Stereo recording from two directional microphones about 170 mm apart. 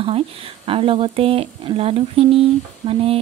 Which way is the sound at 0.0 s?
35° right (ahead or behind).